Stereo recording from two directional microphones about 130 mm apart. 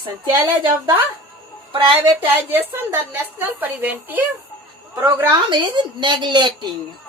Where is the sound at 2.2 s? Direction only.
15° right (ahead or behind).